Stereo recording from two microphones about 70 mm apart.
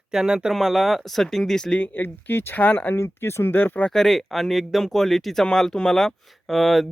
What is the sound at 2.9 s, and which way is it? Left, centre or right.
Speech, left.